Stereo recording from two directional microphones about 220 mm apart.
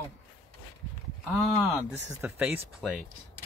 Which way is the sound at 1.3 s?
Centre (ahead or behind).